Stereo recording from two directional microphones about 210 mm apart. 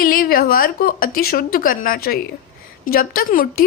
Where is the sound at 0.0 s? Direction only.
45° left (ahead or behind).